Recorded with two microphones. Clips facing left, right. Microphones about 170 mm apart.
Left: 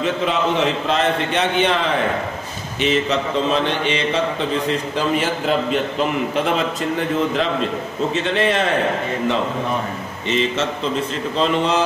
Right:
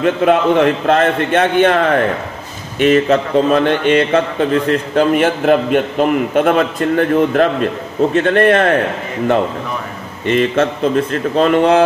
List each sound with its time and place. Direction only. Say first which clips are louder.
0.0 s a man's voice: right 7 dB; 55° right (ahead or behind)
10.2 s a man's voice: right 7 dB; 55° right (ahead or behind)